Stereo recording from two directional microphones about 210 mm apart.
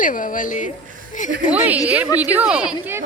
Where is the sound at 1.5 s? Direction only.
5° right (ahead or behind).